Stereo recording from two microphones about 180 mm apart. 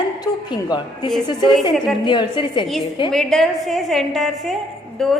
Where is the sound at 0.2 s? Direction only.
25° left (ahead or behind).